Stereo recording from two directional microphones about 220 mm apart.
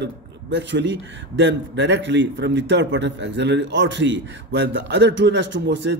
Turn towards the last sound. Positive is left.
turn(degrees=-55)  # may be behind; listen again after turning